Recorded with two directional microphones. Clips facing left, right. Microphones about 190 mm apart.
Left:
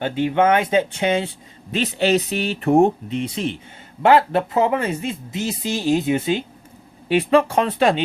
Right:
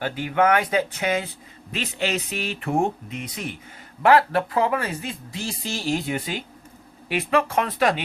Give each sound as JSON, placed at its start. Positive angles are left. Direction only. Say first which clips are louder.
{"t": 0.0, "sound": "speech", "louder": "left 4 dB", "side_deg": 25}